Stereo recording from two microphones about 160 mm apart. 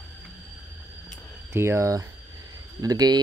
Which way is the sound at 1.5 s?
15° right (ahead or behind).